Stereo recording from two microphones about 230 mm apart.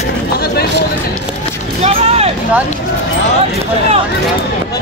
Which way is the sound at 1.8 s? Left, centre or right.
Right.